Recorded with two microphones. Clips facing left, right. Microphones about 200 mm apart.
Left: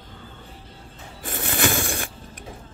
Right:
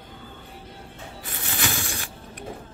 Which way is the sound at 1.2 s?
50° left (ahead or behind).